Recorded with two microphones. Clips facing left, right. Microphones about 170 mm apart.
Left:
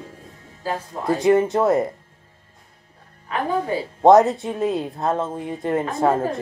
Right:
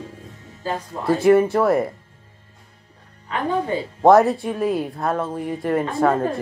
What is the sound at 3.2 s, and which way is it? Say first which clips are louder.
A woman's voice: even; 15° left (ahead or behind).